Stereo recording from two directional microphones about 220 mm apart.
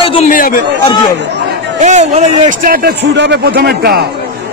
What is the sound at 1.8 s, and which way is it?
A man's voice, 30° right (ahead or behind).